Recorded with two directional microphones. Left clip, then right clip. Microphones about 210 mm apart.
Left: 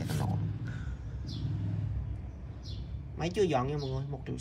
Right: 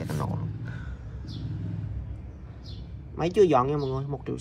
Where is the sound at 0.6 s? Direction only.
15° left (ahead or behind).